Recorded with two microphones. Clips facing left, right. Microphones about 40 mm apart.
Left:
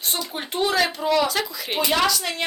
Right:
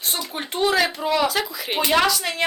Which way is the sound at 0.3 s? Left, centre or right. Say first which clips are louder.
Right 2 dB; centre.